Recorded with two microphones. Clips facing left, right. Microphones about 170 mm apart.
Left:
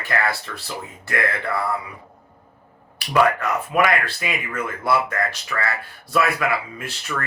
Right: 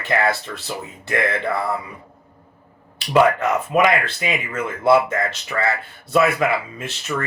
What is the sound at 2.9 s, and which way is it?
Speech, 25° right (ahead or behind).